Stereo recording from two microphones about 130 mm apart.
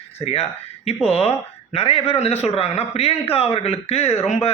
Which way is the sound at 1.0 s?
50° left (ahead or behind).